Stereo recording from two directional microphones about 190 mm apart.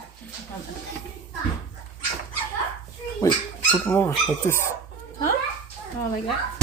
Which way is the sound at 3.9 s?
10° left (ahead or behind).